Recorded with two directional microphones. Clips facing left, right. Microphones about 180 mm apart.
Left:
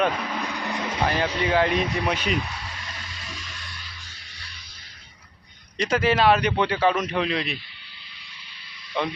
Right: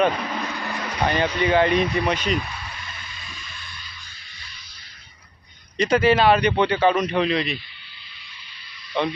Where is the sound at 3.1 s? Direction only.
85° left.